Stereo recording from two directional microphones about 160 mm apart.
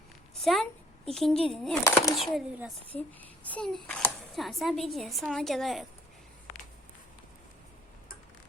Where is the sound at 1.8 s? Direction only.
20° left (ahead or behind).